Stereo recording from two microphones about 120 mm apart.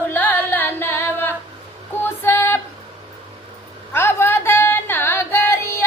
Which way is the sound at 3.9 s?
20° left (ahead or behind).